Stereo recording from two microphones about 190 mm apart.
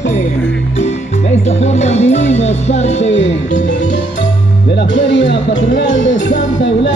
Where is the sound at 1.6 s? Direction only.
35° left (ahead or behind).